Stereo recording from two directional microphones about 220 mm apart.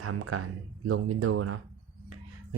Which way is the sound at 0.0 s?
80° right.